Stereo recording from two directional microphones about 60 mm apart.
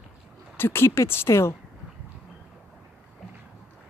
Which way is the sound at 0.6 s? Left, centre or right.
Left.